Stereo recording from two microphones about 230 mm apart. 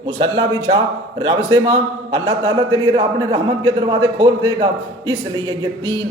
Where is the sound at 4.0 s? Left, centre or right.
Centre.